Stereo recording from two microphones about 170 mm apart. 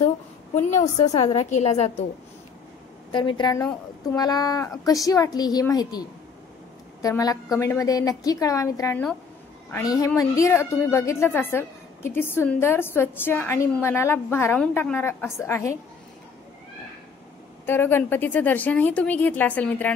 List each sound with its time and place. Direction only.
0.6 s a woman's voice: 45° left (ahead or behind)
1.0 s a woman's voice: 20° left (ahead or behind)
1.3 s a woman's voice: 40° left (ahead or behind)
3.1 s a woman's voice: 30° left (ahead or behind)
17.6 s a woman's voice: 15° left (ahead or behind)